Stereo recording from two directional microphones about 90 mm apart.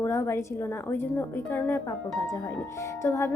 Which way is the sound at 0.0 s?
30° left (ahead or behind).